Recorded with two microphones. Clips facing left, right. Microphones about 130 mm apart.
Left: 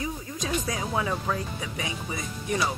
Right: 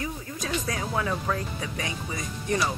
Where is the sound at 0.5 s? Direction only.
15° left (ahead or behind).